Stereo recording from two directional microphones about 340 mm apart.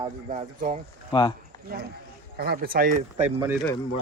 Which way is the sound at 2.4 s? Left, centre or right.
Right.